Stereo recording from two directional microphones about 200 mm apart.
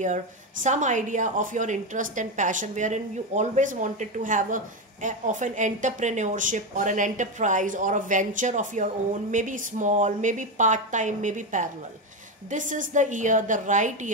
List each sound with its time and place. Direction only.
0.0 s speech: 40° right (ahead or behind)